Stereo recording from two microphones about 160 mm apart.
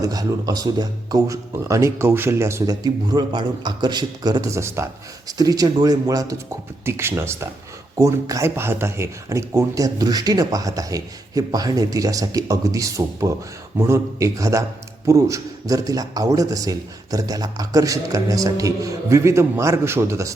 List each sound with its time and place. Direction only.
0.0 s speech: 20° right (ahead or behind)